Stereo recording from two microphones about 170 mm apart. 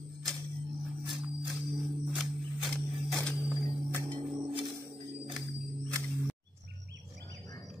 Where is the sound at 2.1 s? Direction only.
5° right (ahead or behind).